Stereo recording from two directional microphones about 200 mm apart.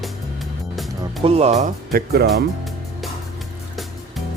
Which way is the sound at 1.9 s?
50° right (ahead or behind).